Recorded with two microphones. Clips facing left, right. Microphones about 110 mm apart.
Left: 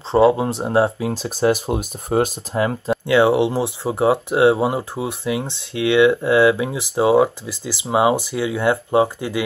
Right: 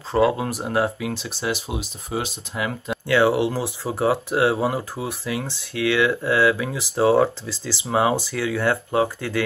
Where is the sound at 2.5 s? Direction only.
35° left (ahead or behind).